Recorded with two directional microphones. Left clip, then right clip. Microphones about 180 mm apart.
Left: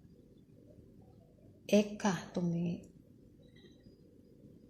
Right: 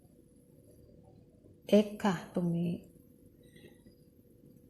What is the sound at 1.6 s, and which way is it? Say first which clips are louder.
A woman's voice: right 3 dB; 25° right (ahead or behind).